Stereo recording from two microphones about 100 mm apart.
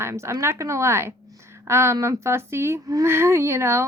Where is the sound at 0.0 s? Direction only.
30° right (ahead or behind).